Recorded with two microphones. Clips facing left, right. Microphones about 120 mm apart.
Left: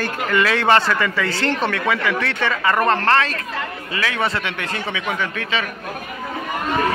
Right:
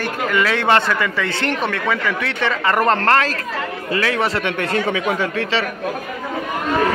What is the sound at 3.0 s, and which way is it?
A man's voice, 40° right (ahead or behind).